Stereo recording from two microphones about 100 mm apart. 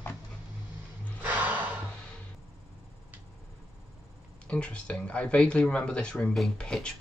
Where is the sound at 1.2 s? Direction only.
15° right (ahead or behind).